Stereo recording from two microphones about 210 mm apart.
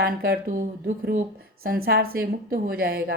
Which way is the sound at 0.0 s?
45° right (ahead or behind).